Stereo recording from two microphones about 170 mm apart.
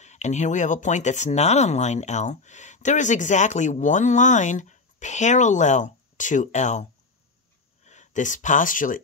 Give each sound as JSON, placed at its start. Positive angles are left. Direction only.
{"t": 0.0, "sound": "speech", "side_deg": 45}